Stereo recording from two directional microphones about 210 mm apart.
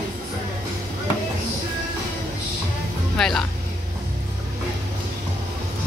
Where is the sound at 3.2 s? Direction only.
5° left (ahead or behind).